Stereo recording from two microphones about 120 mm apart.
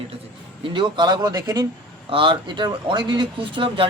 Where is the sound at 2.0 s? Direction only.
45° right (ahead or behind).